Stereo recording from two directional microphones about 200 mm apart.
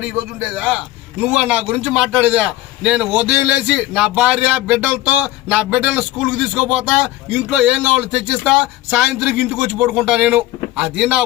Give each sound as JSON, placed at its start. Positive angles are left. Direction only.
{"t": 0.0, "sound": "a man's voice", "side_deg": -5}